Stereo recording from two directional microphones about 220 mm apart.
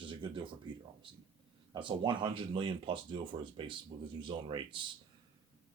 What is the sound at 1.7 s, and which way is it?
Speech, 20° right (ahead or behind).